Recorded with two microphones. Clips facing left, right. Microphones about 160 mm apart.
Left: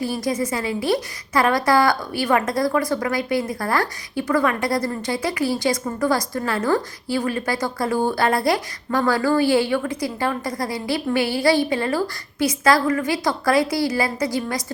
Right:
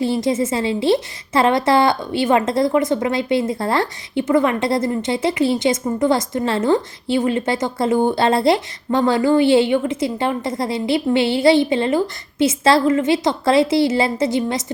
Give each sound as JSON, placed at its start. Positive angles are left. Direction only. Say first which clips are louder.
{"t": 0.0, "sound": "a woman's voice", "louder": "right 5 dB", "side_deg": -25}